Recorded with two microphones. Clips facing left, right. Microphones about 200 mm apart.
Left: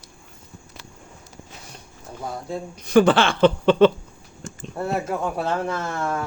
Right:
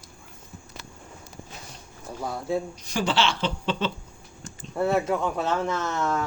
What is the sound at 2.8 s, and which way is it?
Speech, 55° left (ahead or behind).